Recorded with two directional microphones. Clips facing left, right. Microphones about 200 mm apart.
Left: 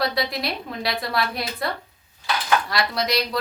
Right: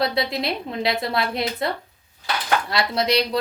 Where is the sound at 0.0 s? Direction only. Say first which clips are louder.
Right 2 dB; 25° right (ahead or behind).